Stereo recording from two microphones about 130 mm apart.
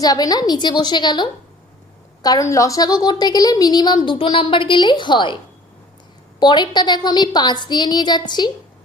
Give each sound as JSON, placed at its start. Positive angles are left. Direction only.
{"t": 0.0, "sound": "a woman's voice", "side_deg": 30}
{"t": 6.4, "sound": "a woman's voice", "side_deg": 35}